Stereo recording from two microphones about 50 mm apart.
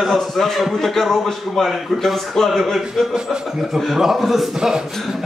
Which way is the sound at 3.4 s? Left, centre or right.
Centre.